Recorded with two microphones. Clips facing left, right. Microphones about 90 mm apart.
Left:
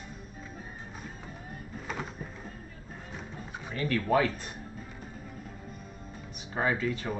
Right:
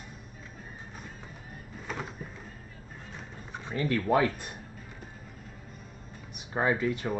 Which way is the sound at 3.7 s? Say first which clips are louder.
Right 2 dB; 25° right (ahead or behind).